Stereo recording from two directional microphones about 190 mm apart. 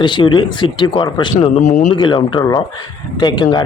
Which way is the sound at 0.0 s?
25° left (ahead or behind).